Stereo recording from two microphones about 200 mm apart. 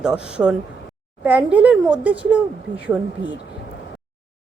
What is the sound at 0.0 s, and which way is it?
A woman's voice, 5° right (ahead or behind).